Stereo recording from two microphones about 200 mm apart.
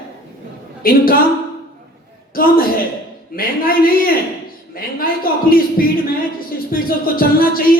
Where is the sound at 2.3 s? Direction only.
45° left (ahead or behind).